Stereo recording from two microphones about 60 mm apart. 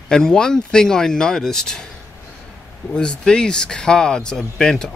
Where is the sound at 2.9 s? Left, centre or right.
Centre.